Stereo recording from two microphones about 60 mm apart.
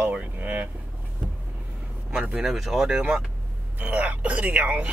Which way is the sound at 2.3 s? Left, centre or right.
Centre.